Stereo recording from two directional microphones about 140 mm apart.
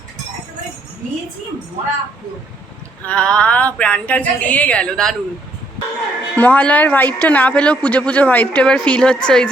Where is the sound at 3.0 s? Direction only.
10° left (ahead or behind).